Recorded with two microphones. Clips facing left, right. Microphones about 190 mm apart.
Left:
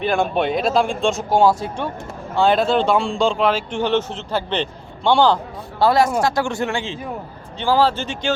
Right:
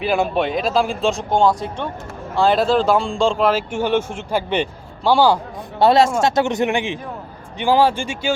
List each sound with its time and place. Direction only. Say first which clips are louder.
0.0 s speech: even; 5° right (ahead or behind)
5.8 s speech: right 2 dB; 25° right (ahead or behind)